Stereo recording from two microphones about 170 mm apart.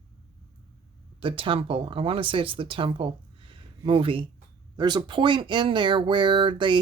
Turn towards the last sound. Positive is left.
turn(degrees=-30)  # may be behind; listen again after turning